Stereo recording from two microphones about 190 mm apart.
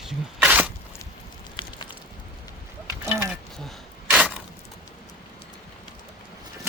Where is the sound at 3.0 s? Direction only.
10° right (ahead or behind).